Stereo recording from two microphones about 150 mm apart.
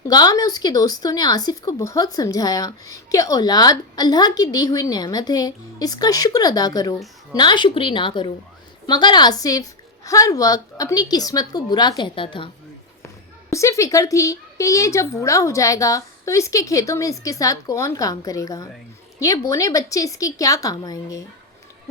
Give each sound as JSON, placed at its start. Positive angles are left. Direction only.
{"t": 0.0, "sound": "a woman's voice", "side_deg": 25}
{"t": 13.5, "sound": "speech", "side_deg": 20}